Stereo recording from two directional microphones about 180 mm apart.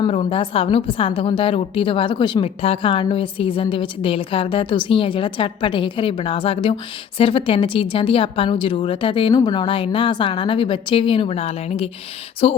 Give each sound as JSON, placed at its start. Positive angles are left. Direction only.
{"t": 0.0, "sound": "a woman's voice", "side_deg": 30}